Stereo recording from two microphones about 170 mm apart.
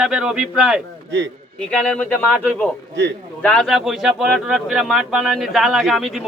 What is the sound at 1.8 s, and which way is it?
Speech, 5° left (ahead or behind).